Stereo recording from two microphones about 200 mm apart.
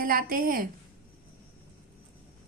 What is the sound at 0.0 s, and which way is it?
Speech, 45° right (ahead or behind).